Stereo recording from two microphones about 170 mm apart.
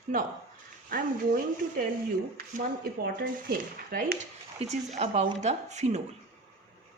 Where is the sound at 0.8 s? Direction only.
50° right (ahead or behind).